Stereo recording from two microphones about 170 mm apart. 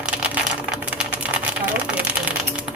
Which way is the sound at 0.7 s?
5° right (ahead or behind).